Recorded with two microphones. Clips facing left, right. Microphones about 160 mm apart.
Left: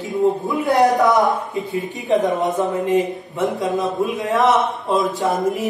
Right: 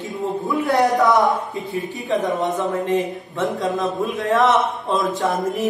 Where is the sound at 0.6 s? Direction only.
20° left (ahead or behind).